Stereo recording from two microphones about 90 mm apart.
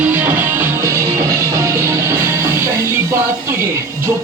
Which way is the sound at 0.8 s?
35° right (ahead or behind).